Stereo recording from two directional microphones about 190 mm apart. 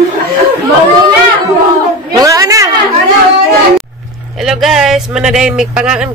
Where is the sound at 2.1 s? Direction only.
15° right (ahead or behind).